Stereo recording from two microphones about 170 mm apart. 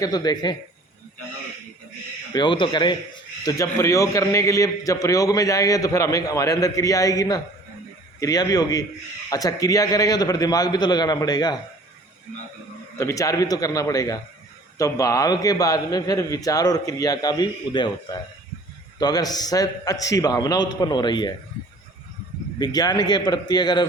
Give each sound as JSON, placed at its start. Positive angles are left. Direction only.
{"t": 0.0, "sound": "a man's voice", "side_deg": 25}
{"t": 2.3, "sound": "a man's voice", "side_deg": 25}
{"t": 13.0, "sound": "a man's voice", "side_deg": 20}
{"t": 22.5, "sound": "a man's voice", "side_deg": 25}